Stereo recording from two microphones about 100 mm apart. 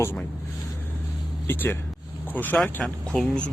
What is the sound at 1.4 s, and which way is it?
Speech, 20° left (ahead or behind).